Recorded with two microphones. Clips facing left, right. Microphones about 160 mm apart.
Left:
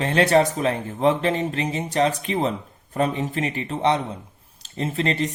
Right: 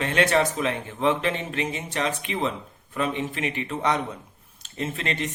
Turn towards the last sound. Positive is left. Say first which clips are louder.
# left 5 dB
turn(degrees=35)  # may be behind; listen again after turning